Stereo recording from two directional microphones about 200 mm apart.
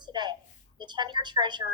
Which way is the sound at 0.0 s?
20° right (ahead or behind).